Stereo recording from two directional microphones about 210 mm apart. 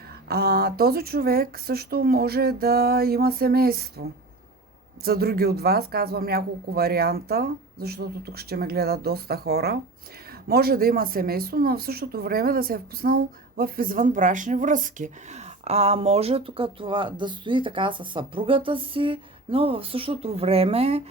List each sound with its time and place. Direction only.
0.3 s speech: 50° right (ahead or behind)
5.0 s speech: 45° right (ahead or behind); by 21.0 s 30° right (ahead or behind)